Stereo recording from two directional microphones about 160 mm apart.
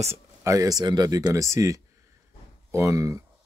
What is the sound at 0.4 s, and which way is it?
Speech, 20° right (ahead or behind).